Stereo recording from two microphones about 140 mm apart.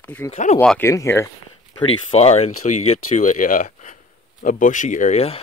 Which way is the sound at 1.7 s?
45° left (ahead or behind).